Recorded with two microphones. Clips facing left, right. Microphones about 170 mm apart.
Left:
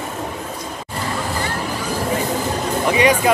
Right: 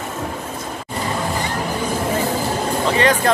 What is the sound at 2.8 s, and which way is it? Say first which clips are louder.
Speech: left 2 dB; 15° left (ahead or behind).